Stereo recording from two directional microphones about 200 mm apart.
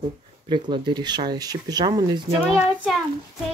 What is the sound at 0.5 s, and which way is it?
Speech, 20° right (ahead or behind).